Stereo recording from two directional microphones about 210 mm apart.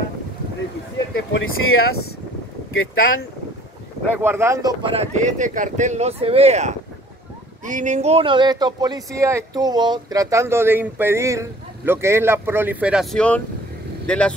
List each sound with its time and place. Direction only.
1.3 s speech: 75° left (ahead or behind)
4.1 s speech: 10° right (ahead or behind)
4.9 s speech: 35° right (ahead or behind); by 14.3 s 5° left (ahead or behind)